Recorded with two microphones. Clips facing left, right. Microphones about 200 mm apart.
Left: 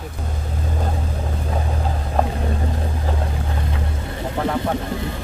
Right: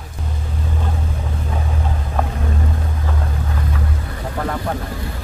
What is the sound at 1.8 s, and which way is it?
Vehicle, 35° left (ahead or behind).